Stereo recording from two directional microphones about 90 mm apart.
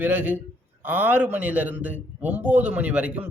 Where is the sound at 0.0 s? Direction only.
20° right (ahead or behind).